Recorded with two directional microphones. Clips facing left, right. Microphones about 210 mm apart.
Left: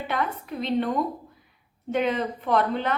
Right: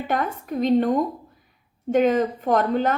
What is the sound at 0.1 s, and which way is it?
A woman's voice, 45° right (ahead or behind).